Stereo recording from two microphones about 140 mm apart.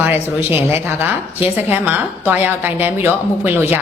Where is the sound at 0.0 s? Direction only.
15° right (ahead or behind).